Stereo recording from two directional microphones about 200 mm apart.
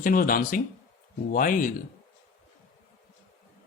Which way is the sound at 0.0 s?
45° left (ahead or behind).